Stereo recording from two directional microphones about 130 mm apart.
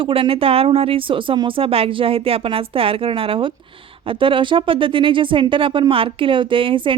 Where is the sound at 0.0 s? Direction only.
45° right (ahead or behind).